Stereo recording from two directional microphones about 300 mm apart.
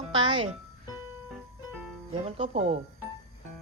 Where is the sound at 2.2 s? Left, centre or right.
Right.